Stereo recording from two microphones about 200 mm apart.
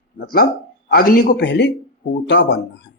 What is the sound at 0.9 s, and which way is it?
A man's voice, 45° left (ahead or behind).